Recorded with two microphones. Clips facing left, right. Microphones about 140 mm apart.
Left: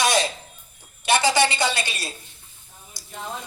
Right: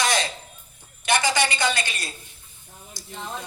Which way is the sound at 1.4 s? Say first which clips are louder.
Left 2 dB; 25° left (ahead or behind).